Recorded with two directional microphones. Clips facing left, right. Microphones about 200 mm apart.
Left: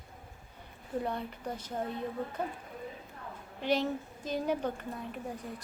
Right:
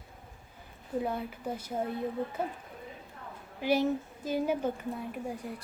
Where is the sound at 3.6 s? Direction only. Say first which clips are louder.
Right 3 dB; 10° right (ahead or behind).